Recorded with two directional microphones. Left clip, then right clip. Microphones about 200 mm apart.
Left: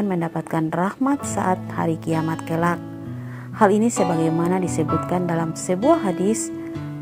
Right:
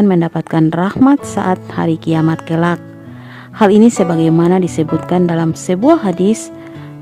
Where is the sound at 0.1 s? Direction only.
40° right (ahead or behind).